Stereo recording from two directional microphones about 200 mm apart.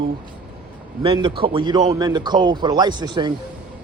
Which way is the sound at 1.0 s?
25° right (ahead or behind).